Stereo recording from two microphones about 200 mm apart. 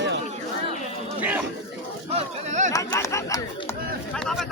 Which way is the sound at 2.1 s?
35° right (ahead or behind).